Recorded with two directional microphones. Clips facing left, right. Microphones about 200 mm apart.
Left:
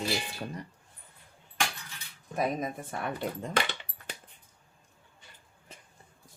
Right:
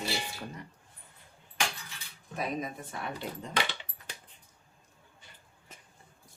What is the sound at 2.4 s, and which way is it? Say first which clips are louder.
Speech: left 4 dB; 50° left (ahead or behind).